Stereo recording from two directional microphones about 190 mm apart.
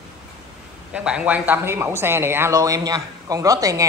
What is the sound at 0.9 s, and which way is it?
Speech, 5° right (ahead or behind).